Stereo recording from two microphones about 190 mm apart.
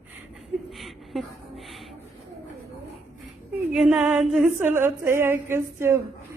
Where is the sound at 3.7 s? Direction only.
5° right (ahead or behind).